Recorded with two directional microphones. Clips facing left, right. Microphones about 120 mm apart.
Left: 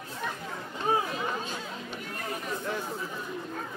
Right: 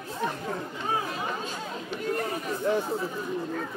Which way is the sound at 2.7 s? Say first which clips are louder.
Right 10 dB; 30° right (ahead or behind).